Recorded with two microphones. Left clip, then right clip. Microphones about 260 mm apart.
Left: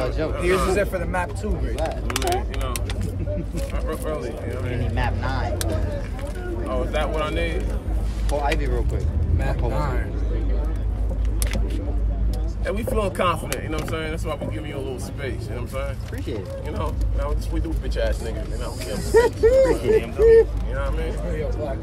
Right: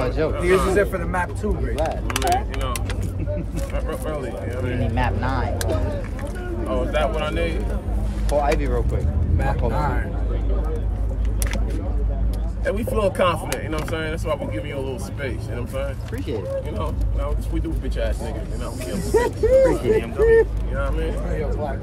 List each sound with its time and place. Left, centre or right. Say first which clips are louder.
0.0 s a sound: right 3 dB; right
0.3 s speech: right 2 dB; centre
4.9 s speech: right 3 dB; right
6.7 s speech: right 3 dB; centre
9.4 s speech: right 3 dB; centre
12.6 s speech: right 3 dB; centre
16.8 s speech: even; left
19.1 s speech: left 1 dB; centre
19.7 s speech: left 1 dB; centre
20.7 s speech: right 2 dB; centre